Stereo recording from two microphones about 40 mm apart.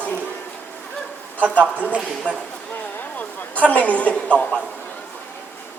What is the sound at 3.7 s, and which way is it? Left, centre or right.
Speech, left.